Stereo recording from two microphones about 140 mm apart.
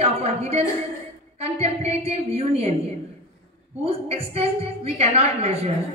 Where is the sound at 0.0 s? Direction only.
50° right (ahead or behind).